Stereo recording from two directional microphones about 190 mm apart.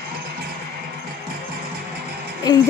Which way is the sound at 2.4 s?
20° left (ahead or behind).